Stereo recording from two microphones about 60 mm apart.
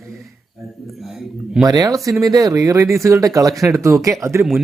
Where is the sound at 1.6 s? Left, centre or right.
Right.